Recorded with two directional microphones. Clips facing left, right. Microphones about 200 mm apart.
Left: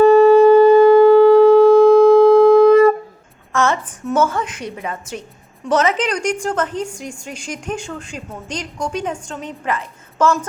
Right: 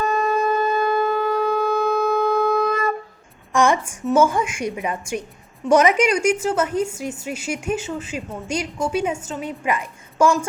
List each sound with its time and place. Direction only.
0.0 s sine wave: 30° left (ahead or behind)
3.5 s a sound: 15° right (ahead or behind)
4.0 s a woman's voice: 10° right (ahead or behind)